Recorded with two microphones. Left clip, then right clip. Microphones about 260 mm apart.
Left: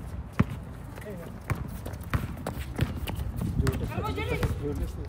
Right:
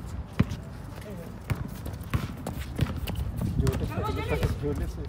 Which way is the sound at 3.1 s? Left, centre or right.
Centre.